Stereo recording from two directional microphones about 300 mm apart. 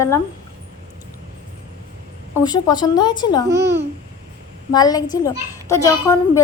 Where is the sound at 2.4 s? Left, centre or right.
Centre.